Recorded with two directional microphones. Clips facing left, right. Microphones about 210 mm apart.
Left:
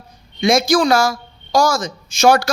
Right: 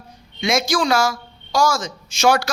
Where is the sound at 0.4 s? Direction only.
35° left (ahead or behind).